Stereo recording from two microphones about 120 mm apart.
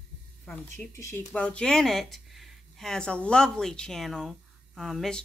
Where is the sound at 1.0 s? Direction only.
25° left (ahead or behind).